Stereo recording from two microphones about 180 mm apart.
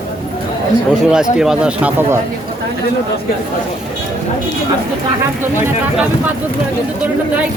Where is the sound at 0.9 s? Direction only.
5° right (ahead or behind).